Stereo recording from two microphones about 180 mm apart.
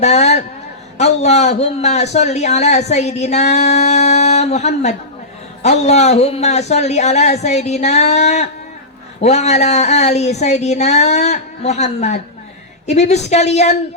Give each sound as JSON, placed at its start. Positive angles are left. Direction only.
{"t": 0.0, "sound": "a man's voice", "side_deg": 40}